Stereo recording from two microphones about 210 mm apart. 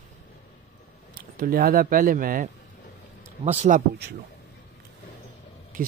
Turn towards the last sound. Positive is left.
turn(degrees=-40)  # may be behind; listen again after turning